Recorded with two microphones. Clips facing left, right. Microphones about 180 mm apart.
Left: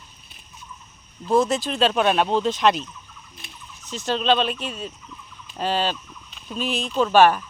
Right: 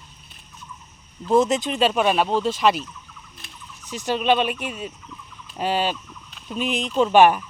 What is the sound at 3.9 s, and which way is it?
Speech, 15° right (ahead or behind).